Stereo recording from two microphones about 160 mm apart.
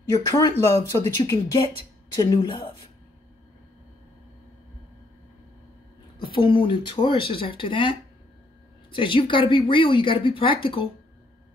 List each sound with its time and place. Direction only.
0.1 s speech: 20° left (ahead or behind)
6.2 s a woman's voice: 30° left (ahead or behind)
8.9 s a woman's voice: 30° left (ahead or behind)